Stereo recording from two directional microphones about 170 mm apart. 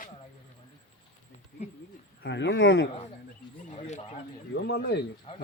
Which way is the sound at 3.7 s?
40° left (ahead or behind).